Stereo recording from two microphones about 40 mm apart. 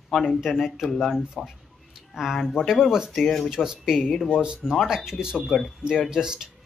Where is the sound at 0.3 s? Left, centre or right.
Centre.